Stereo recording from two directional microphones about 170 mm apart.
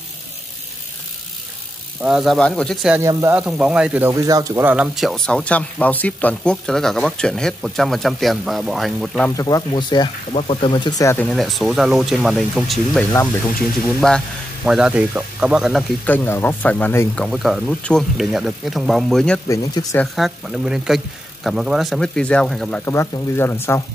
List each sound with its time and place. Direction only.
2.0 s speech: 5° right (ahead or behind)
2.9 s speech: 15° right (ahead or behind)
4.1 s speech: 20° right (ahead or behind); by 9.3 s centre (ahead or behind)
9.4 s speech: 20° left (ahead or behind)
11.1 s speech: centre (ahead or behind)
14.0 s speech: centre (ahead or behind)
16.1 s speech: 10° left (ahead or behind)
17.2 s speech: centre (ahead or behind)
19.4 s speech: 20° left (ahead or behind)
20.2 s speech: centre (ahead or behind)
22.8 s speech: 15° left (ahead or behind)